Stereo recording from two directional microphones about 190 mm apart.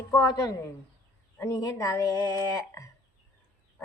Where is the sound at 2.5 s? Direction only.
15° left (ahead or behind).